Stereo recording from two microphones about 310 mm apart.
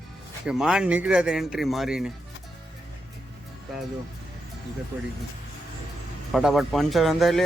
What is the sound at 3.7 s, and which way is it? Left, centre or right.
Speech, centre.